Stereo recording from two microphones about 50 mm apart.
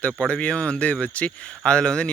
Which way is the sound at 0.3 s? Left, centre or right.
Left.